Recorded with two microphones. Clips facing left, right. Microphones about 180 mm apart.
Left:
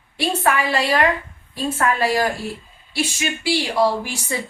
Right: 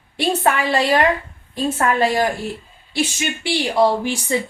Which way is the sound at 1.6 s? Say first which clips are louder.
Right 2 dB; 25° right (ahead or behind).